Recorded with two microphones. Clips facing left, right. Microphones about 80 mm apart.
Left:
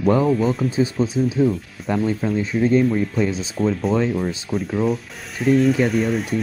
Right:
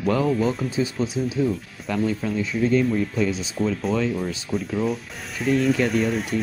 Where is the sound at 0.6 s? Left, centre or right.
Left.